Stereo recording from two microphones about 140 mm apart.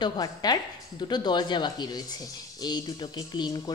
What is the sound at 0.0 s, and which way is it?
A woman's voice, 30° left (ahead or behind).